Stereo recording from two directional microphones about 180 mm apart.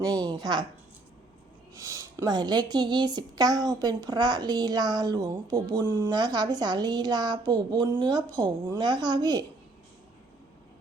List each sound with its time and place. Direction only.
0.0 s speech: 20° right (ahead or behind)
1.8 s speech: 15° right (ahead or behind)